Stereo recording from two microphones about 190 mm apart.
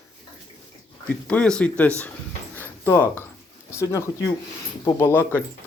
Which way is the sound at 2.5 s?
10° left (ahead or behind).